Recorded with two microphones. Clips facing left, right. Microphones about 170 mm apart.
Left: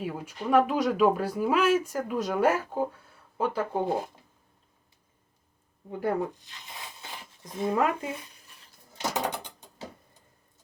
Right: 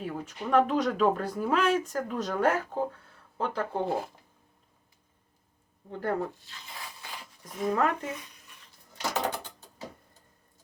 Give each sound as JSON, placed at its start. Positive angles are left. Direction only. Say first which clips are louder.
{"t": 0.0, "sound": "speech", "louder": "left 1 dB", "side_deg": 10}
{"t": 5.9, "sound": "speech", "louder": "left 2 dB", "side_deg": 10}
{"t": 9.0, "sound": "mechanisms", "louder": "even", "side_deg": 15}